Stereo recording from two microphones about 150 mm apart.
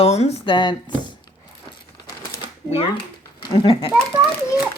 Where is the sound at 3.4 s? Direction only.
35° left (ahead or behind).